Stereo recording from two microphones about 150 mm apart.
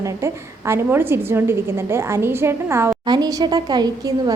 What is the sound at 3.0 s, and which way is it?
A woman's voice, 25° right (ahead or behind).